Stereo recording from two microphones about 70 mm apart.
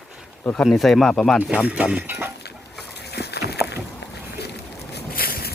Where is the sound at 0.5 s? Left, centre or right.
Centre.